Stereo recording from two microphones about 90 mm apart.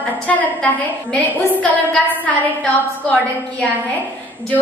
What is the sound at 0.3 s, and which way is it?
A woman's voice, 15° left (ahead or behind).